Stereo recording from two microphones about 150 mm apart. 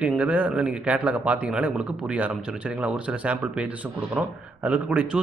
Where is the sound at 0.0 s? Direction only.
5° right (ahead or behind).